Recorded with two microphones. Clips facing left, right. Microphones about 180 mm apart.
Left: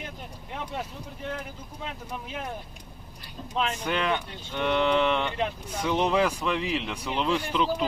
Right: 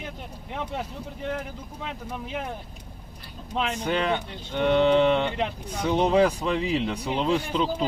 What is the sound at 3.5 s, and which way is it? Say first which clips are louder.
Speech: right 2 dB; 35° right (ahead or behind).